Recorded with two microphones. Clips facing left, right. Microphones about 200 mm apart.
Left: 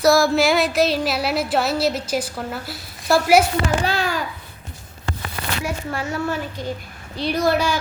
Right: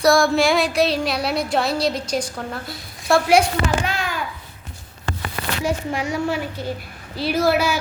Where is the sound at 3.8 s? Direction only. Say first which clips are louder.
Left 3 dB; 35° left (ahead or behind).